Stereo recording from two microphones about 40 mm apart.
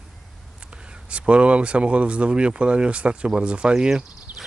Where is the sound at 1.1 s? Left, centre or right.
Right.